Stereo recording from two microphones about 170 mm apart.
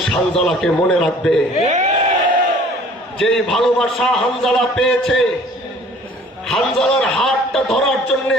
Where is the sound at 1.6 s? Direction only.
45° right (ahead or behind).